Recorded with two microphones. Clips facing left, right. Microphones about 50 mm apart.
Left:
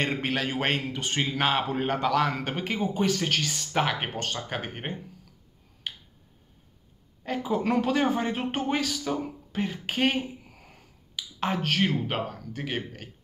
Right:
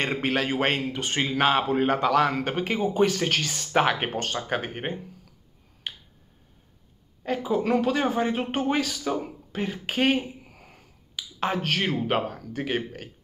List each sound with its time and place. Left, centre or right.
0.0 s a man's voice: centre
2.9 s speech: right
7.2 s a man's voice: centre
7.5 s speech: centre